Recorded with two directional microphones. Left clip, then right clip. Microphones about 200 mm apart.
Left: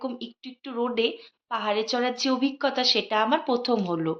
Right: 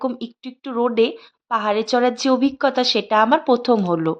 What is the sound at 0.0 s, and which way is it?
A woman's voice, 55° right (ahead or behind).